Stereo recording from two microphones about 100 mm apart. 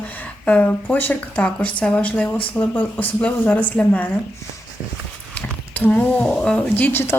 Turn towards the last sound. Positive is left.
turn(degrees=20)  # may be behind; listen again after turning